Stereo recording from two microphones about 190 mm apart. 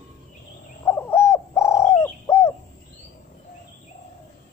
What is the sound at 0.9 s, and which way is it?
Bird, 10° left (ahead or behind).